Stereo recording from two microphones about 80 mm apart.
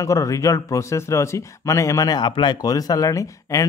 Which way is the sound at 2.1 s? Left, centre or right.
Left.